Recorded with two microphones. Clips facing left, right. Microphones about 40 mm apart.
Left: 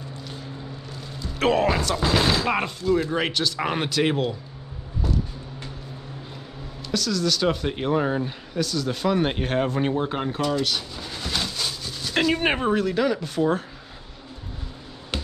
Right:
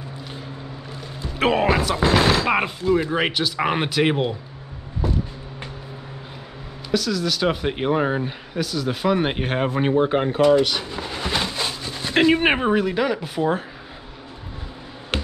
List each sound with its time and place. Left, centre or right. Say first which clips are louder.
1.4 s speech: right 2 dB; centre
5.0 s a sound: right 3 dB; centre
6.9 s speech: right 2 dB; centre
15.1 s music: right 5 dB; right